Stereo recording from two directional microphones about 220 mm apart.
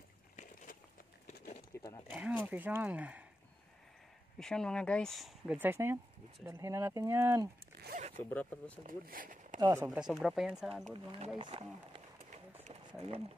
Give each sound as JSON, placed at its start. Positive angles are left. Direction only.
{"t": 1.2, "sound": "a sound", "side_deg": 35}
{"t": 1.7, "sound": "livestock", "side_deg": 15}
{"t": 2.0, "sound": "speech", "side_deg": -5}
{"t": 4.4, "sound": "speech", "side_deg": 5}
{"t": 8.2, "sound": "speech", "side_deg": 5}
{"t": 8.8, "sound": "speech", "side_deg": -40}
{"t": 9.6, "sound": "speech", "side_deg": -10}
{"t": 11.1, "sound": "speech", "side_deg": -25}
{"t": 12.6, "sound": "a sound", "side_deg": -30}